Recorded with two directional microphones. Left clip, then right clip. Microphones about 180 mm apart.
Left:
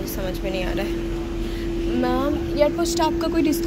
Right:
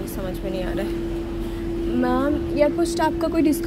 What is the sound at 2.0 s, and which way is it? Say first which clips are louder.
A woman's voice: right 1 dB; 30° right (ahead or behind).